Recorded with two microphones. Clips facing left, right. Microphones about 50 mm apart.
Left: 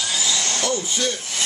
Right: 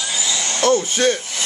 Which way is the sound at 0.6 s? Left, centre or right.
Right.